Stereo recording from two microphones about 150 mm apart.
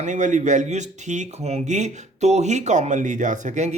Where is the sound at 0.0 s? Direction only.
55° right (ahead or behind).